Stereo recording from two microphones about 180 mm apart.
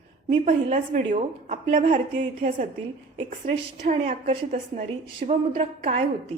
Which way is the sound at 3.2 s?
35° right (ahead or behind).